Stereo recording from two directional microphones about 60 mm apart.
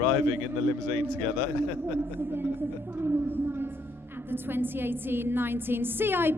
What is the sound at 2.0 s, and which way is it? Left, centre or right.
A woman's voice, right.